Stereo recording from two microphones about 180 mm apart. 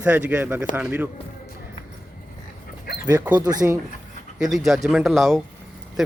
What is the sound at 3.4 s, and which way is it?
Speech, 20° right (ahead or behind).